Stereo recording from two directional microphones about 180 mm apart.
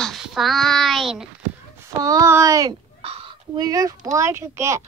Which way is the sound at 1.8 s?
20° right (ahead or behind).